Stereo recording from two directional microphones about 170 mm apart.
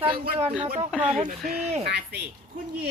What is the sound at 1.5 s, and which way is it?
Speech, 40° right (ahead or behind).